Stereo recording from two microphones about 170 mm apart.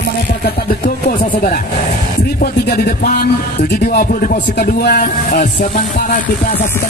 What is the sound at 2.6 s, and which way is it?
Speech, 60° left (ahead or behind).